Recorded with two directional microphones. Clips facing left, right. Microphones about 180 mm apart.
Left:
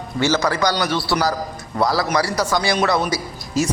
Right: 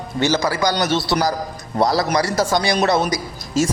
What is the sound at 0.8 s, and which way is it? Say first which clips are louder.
A man's voice: right 1 dB; 20° right (ahead or behind).